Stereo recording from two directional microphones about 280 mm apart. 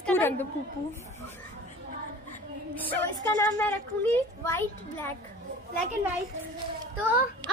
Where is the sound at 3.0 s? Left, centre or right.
Centre.